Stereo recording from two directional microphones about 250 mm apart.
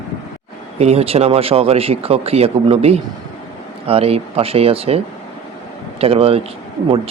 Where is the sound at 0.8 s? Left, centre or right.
Right.